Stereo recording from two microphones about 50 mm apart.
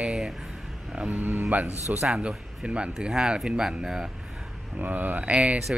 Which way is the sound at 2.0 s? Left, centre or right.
Centre.